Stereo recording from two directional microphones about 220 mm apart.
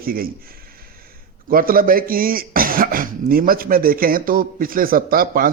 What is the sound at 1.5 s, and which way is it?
Speech, 40° right (ahead or behind).